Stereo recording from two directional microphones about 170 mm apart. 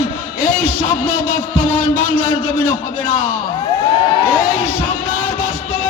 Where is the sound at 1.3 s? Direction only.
55° left (ahead or behind).